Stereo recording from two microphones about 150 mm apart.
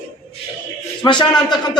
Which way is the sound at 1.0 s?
20° left (ahead or behind).